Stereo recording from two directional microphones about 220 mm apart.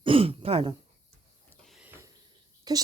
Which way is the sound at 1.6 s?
5° right (ahead or behind).